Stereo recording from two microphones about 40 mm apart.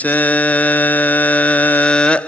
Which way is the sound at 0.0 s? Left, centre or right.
Left.